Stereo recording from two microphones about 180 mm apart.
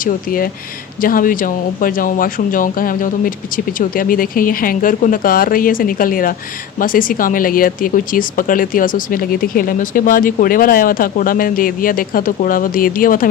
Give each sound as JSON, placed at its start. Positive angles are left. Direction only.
{"t": 0.0, "sound": "a woman's voice", "side_deg": 50}